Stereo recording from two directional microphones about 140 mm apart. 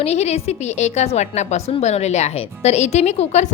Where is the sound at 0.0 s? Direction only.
50° left (ahead or behind).